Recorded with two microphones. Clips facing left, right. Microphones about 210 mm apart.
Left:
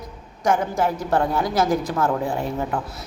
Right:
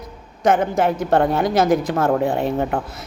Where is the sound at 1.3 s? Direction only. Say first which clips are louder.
Right 4 dB; 20° right (ahead or behind).